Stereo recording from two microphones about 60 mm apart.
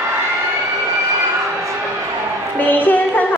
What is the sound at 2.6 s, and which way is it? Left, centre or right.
Music, left.